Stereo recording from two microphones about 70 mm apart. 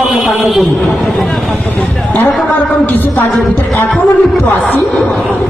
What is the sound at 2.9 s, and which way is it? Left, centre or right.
Speech, left.